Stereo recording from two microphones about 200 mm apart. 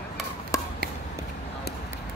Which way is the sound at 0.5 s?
15° left (ahead or behind).